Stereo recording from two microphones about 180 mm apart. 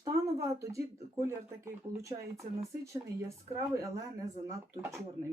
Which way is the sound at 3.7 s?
15° right (ahead or behind).